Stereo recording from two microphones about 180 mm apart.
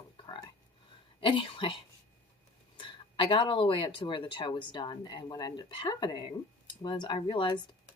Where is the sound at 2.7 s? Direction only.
30° left (ahead or behind).